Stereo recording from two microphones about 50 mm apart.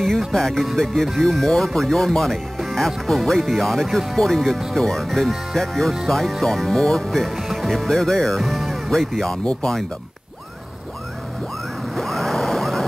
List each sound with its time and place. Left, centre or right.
0.3 s speech: centre
9.4 s speech: left
11.9 s a sound: centre